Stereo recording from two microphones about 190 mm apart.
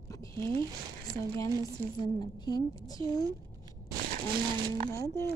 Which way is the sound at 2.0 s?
20° left (ahead or behind).